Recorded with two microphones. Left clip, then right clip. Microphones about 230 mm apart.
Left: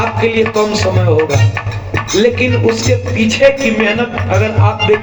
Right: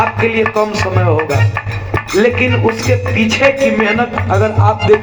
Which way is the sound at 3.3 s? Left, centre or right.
Right.